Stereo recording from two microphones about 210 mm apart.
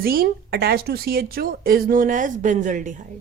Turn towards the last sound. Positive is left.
turn(degrees=-35)  # may be behind; listen again after turning